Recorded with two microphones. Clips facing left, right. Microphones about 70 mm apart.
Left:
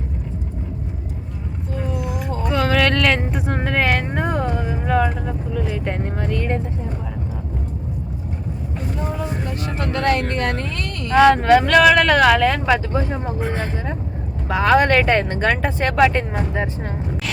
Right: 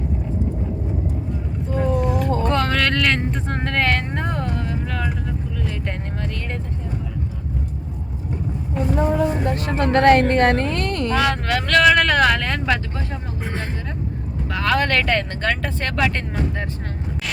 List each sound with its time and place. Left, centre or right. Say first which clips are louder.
2.2 s a sound: right 1 dB; centre
6.2 s vehicle: left 9 dB; centre
9.1 s vehicle: right 6 dB; right
11.4 s speech: left 4 dB; centre
14.5 s speech: left 5 dB; centre